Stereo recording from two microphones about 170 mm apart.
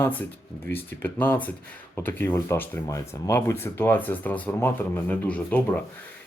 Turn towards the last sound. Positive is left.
turn(degrees=10)  # may be behind; listen again after turning